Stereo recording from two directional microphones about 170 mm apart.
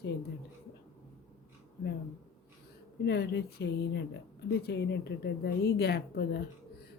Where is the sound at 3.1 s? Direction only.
75° left (ahead or behind).